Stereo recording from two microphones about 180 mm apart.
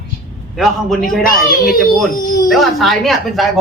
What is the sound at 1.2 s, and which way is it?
Speech, 55° left (ahead or behind).